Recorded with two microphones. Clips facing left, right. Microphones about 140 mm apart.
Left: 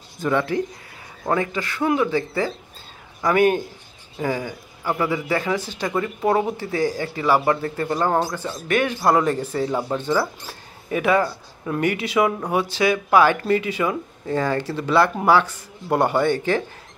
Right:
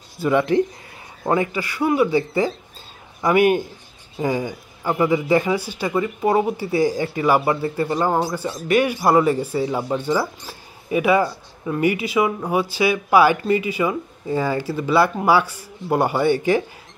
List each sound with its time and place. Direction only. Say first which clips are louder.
0.2 s speech: right 4 dB; 15° right (ahead or behind)